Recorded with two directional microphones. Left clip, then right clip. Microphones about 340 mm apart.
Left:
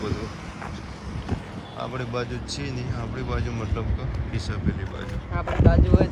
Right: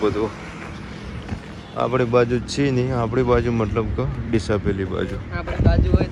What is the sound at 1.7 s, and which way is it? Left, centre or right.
Speech, centre.